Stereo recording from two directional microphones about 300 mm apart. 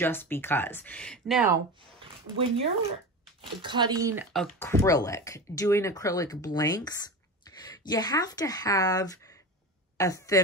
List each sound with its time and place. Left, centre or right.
0.0 s speech: centre
2.0 s a sound: centre
3.6 s speech: centre